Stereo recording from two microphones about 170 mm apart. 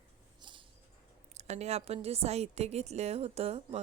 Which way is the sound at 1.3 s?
40° right (ahead or behind).